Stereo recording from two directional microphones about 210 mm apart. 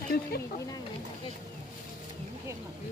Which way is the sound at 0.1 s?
45° left (ahead or behind).